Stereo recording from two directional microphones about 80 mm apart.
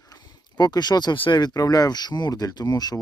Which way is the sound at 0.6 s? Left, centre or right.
Left.